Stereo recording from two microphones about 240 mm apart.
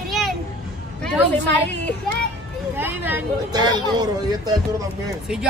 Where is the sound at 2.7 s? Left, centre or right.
Centre.